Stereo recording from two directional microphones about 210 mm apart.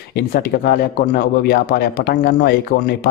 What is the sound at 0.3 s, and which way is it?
Speech, 45° left (ahead or behind).